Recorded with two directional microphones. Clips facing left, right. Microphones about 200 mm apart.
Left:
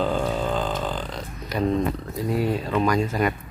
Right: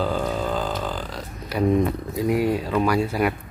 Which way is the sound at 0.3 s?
5° right (ahead or behind).